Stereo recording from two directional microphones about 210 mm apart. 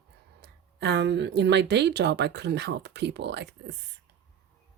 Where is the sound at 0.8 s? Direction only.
55° right (ahead or behind).